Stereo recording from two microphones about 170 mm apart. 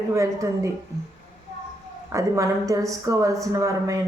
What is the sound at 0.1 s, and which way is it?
Speech, 20° right (ahead or behind).